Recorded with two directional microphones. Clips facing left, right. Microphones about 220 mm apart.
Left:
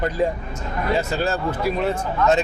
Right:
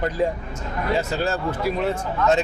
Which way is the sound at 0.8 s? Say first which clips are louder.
Left 1 dB; 20° left (ahead or behind).